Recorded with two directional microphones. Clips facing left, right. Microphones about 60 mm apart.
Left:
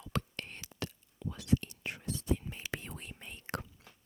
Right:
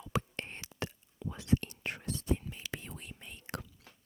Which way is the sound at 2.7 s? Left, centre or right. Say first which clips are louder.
Left 2 dB; left.